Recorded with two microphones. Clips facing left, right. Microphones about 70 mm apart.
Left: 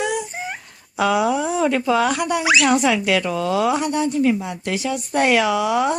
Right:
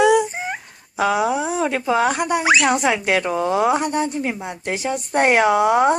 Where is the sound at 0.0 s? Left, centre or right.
Right.